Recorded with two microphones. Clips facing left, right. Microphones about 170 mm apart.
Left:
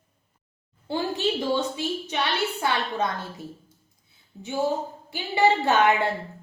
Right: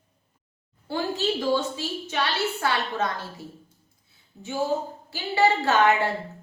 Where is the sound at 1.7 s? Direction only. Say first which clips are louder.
Left 1 dB; 20° left (ahead or behind).